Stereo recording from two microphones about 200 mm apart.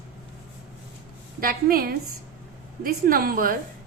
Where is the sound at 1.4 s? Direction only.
45° right (ahead or behind).